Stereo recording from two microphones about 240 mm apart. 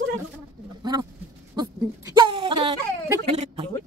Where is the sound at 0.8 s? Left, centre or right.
Centre.